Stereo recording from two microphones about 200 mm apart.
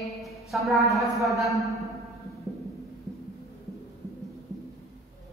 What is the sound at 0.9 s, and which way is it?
Speech, centre (ahead or behind).